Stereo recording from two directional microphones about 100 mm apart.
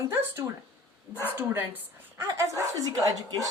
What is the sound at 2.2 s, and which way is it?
A woman's voice, 30° right (ahead or behind).